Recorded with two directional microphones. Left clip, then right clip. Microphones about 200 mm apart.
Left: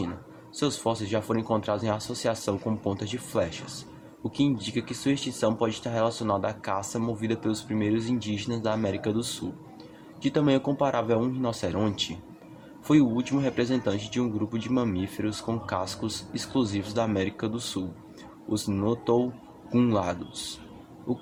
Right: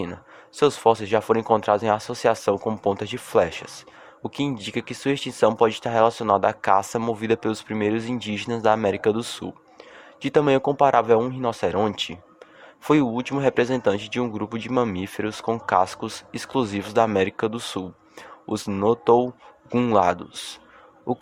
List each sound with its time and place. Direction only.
0.5 s speech: 45° right (ahead or behind)